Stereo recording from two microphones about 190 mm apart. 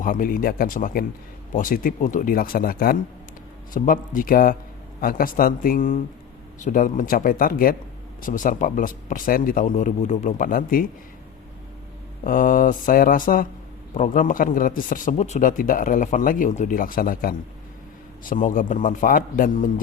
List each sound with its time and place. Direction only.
0.0 s a man's voice: 45° left (ahead or behind)
12.2 s a man's voice: 45° left (ahead or behind)